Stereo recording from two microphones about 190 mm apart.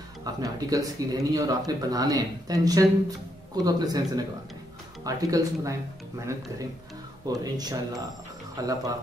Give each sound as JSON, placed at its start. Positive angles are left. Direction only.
{"t": 0.2, "sound": "speech", "side_deg": -20}